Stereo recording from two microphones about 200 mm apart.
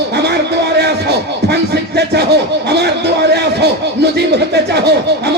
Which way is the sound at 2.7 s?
55° right (ahead or behind).